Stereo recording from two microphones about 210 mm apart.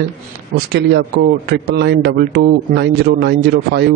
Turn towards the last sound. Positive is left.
turn(degrees=-50)  # may be behind; listen again after turning